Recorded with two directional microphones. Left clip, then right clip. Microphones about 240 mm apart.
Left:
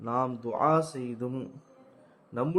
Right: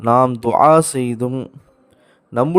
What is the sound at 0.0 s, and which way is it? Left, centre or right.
Speech, right.